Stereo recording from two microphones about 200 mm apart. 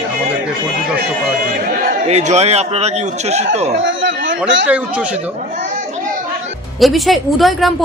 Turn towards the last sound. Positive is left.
turn(degrees=0)  # may be behind; listen again after turning